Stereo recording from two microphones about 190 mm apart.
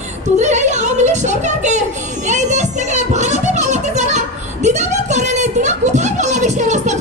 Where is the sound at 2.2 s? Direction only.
40° right (ahead or behind).